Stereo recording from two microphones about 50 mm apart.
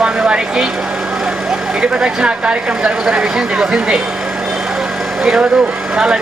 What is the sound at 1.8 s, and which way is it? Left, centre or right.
Speech, centre.